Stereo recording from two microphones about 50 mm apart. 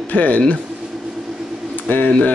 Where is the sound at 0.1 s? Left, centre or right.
Left.